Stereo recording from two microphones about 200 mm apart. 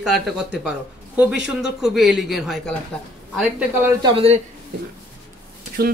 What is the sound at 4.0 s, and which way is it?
Speech, 30° right (ahead or behind).